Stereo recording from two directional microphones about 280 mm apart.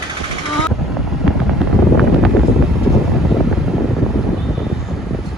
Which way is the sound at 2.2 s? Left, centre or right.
Centre.